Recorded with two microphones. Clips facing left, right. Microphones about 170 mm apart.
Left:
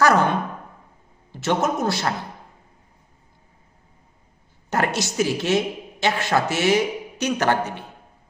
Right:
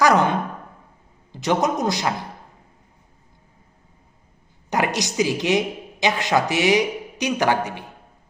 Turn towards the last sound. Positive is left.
turn(degrees=-15)  # may be behind; listen again after turning